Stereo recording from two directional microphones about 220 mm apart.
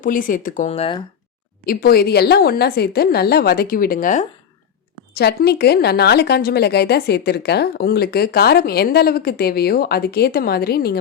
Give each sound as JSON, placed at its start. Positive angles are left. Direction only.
{"t": 0.0, "sound": "speech", "side_deg": 40}
{"t": 1.6, "sound": "speech", "side_deg": 45}
{"t": 5.1, "sound": "speech", "side_deg": 45}